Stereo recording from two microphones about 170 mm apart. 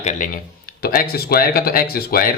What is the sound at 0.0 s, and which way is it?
Speech, 45° left (ahead or behind).